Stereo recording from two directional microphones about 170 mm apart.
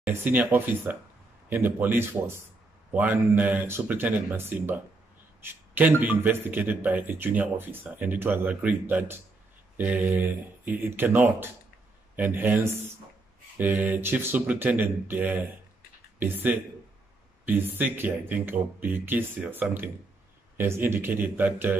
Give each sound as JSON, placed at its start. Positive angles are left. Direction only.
{"t": 0.0, "sound": "a man's voice", "side_deg": -10}